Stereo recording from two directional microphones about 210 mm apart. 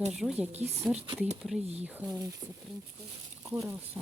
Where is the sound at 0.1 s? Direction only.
5° right (ahead or behind).